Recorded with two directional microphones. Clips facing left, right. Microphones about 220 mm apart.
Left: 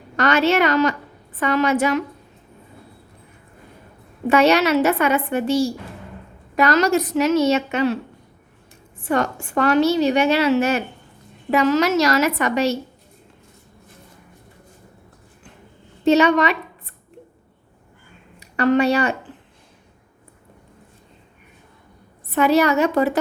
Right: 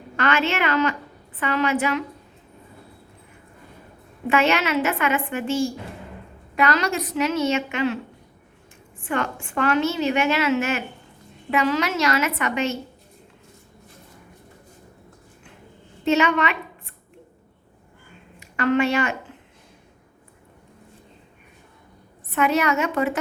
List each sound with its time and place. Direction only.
0.2 s a woman's voice: 40° left (ahead or behind)
4.3 s a woman's voice: 40° left (ahead or behind)
9.0 s a woman's voice: 40° left (ahead or behind)
16.0 s a woman's voice: 35° left (ahead or behind)
18.3 s speech: 35° left (ahead or behind)
22.3 s a woman's voice: 35° left (ahead or behind)